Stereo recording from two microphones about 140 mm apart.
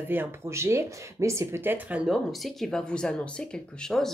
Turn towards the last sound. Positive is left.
turn(degrees=5)  # may be behind; listen again after turning